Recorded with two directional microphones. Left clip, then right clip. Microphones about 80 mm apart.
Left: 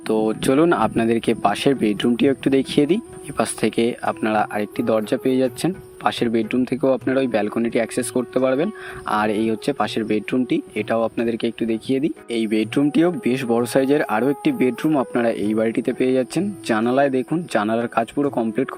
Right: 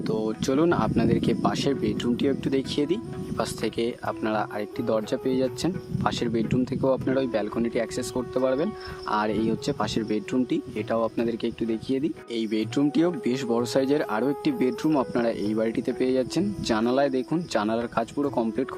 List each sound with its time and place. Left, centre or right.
0.1 s speech: left
12.3 s speech: left